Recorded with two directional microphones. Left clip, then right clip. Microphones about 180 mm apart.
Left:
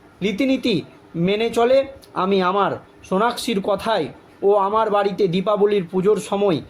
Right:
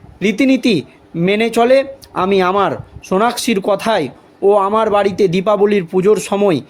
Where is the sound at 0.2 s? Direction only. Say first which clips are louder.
Right 7 dB; 40° right (ahead or behind).